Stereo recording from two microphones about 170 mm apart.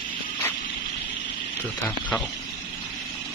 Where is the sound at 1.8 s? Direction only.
5° left (ahead or behind).